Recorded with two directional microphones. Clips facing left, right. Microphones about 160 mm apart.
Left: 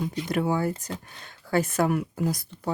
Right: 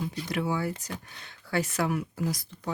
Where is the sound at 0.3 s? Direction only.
50° left (ahead or behind).